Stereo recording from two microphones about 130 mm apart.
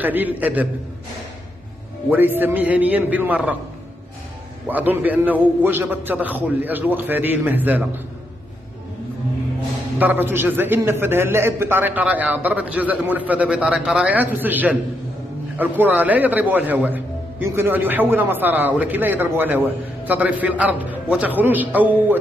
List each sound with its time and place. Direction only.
0.0 s a man's voice: 15° right (ahead or behind)
2.0 s a man's voice: 15° right (ahead or behind)
4.6 s a man's voice: 15° right (ahead or behind)
9.9 s a man's voice: 15° right (ahead or behind)
14.0 s a man's voice: 10° right (ahead or behind)